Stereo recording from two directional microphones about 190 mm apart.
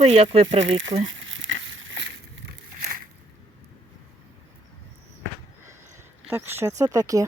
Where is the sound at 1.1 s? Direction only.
85° right.